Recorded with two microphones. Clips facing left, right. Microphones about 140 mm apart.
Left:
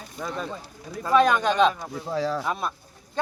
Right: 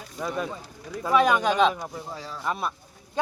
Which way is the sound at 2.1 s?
80° left.